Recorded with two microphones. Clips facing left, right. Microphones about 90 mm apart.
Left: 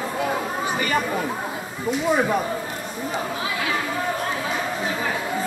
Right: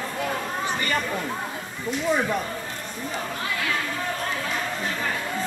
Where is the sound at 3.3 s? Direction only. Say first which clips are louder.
Left 2 dB; 5° left (ahead or behind).